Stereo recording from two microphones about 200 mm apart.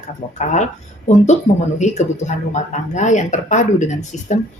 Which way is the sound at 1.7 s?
35° left (ahead or behind).